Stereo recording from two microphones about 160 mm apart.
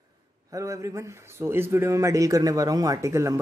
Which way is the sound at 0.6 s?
20° right (ahead or behind).